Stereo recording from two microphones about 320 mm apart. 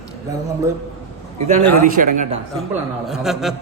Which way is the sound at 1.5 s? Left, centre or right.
Right.